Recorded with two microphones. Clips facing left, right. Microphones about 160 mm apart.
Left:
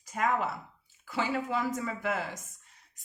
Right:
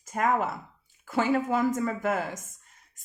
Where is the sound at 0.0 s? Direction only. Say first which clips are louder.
Right 3 dB; 45° right (ahead or behind).